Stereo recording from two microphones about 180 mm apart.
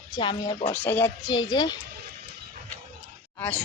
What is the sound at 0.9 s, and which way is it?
Speech, 10° left (ahead or behind).